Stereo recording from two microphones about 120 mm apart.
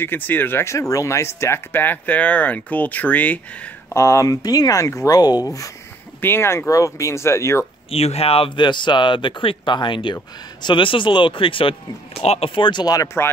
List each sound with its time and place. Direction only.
0.0 s speech: 15° left (ahead or behind)
3.9 s speech: 25° left (ahead or behind)
7.9 s speech: 55° left (ahead or behind)
12.2 s speech: 60° left (ahead or behind); by 13.3 s 25° left (ahead or behind)